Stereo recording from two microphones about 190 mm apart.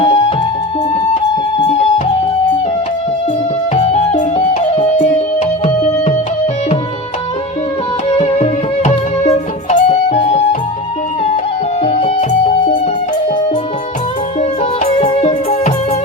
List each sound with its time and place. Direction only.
0.0 s music: 30° left (ahead or behind)
3.8 s music: 35° left (ahead or behind)
8.2 s music: 35° left (ahead or behind)
11.8 s music: 35° left (ahead or behind)
14.6 s music: 30° left (ahead or behind)